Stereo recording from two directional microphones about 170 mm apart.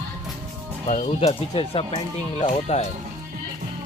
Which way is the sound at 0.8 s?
40° left (ahead or behind).